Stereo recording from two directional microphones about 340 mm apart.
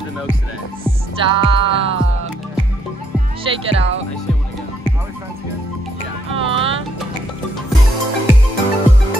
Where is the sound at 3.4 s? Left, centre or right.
Centre.